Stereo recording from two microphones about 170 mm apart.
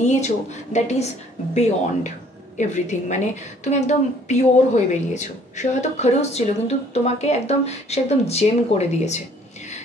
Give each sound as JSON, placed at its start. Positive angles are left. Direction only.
{"t": 0.0, "sound": "a woman's voice", "side_deg": 45}